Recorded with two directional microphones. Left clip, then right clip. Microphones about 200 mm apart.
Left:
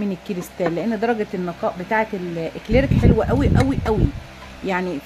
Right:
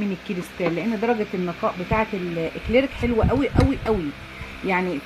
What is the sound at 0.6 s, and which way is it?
Speech, 20° left (ahead or behind).